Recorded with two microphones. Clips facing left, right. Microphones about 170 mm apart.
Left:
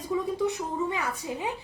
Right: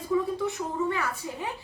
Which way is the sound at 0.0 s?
15° left (ahead or behind).